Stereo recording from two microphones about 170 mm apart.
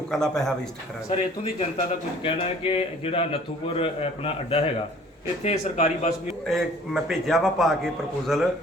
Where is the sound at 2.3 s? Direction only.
30° left (ahead or behind).